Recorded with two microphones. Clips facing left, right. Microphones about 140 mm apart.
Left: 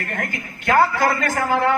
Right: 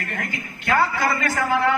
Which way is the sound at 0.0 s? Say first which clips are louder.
Left 2 dB; 50° left (ahead or behind).